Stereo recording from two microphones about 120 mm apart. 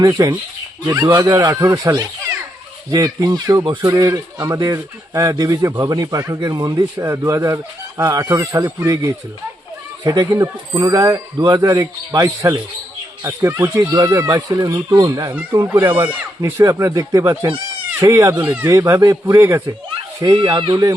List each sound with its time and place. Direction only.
0.0 s speech: 30° right (ahead or behind)
15.6 s speech: 20° right (ahead or behind)
20.1 s speech: 35° right (ahead or behind)